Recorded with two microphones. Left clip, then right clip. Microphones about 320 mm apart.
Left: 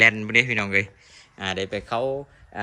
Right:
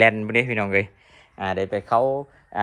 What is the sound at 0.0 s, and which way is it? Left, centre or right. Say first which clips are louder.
Speech: even; centre.